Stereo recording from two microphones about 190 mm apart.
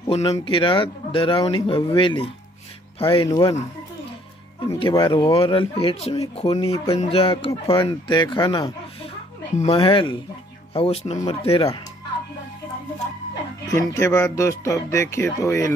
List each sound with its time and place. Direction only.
0.0 s speech: 30° left (ahead or behind)
4.6 s speech: 25° left (ahead or behind)
13.3 s speech: 20° left (ahead or behind)